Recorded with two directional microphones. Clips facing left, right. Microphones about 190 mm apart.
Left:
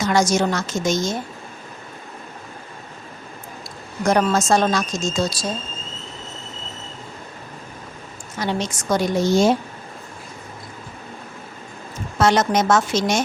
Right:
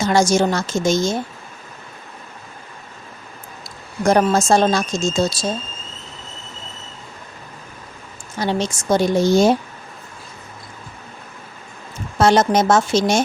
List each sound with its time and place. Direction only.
0.0 s a woman's voice: 30° right (ahead or behind)
4.0 s a woman's voice: 30° right (ahead or behind)
8.4 s a woman's voice: 30° right (ahead or behind)
12.2 s a woman's voice: 30° right (ahead or behind)